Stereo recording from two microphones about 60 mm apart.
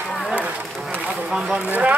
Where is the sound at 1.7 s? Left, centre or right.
Right.